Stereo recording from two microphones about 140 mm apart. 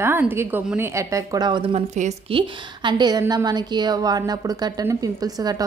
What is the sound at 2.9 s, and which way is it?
A woman's voice, 30° right (ahead or behind).